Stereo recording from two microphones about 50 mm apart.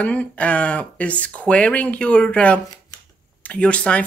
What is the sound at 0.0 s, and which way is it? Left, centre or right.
Speech, left.